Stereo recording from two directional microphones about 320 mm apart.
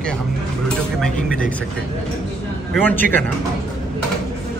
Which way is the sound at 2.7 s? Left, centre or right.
Centre.